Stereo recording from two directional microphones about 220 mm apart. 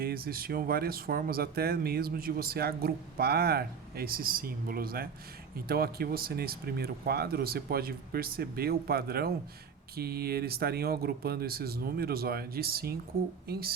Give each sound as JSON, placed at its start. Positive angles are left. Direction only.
{"t": 0.0, "sound": "speech", "side_deg": -45}